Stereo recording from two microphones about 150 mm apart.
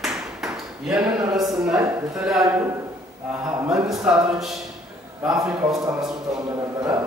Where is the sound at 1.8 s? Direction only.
20° right (ahead or behind).